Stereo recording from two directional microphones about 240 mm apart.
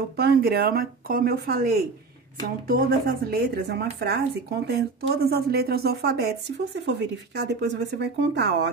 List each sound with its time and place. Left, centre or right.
0.2 s speech: right